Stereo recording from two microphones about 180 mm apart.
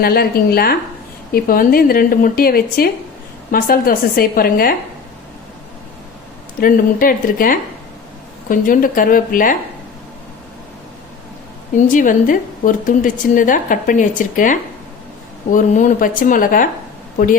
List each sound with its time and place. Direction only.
0.0 s a woman's voice: 60° left (ahead or behind)
6.6 s a woman's voice: 50° left (ahead or behind)
11.8 s a woman's voice: 45° left (ahead or behind)